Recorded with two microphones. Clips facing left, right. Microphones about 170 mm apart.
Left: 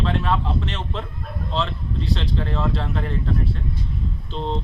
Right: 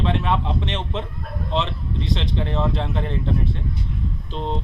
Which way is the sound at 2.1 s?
25° right (ahead or behind).